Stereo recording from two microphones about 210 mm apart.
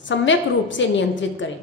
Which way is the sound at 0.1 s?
60° left (ahead or behind).